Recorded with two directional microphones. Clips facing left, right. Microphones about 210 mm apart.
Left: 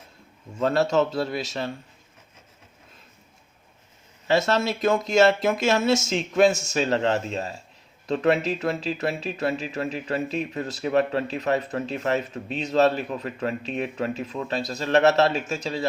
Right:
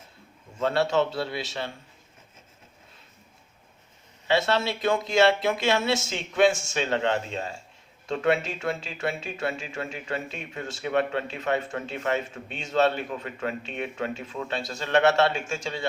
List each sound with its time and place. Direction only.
0.6 s speech: 40° left (ahead or behind)
4.3 s speech: 45° left (ahead or behind)